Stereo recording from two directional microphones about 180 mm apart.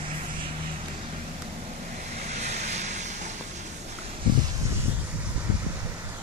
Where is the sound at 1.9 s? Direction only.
40° right (ahead or behind).